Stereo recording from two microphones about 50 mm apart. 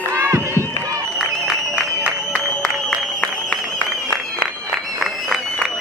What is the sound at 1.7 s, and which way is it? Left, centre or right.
Music, right.